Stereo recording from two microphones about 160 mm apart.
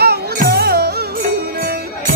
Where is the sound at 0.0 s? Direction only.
80° right.